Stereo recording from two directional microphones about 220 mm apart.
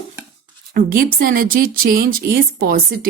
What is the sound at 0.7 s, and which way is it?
A woman's voice, 40° right (ahead or behind).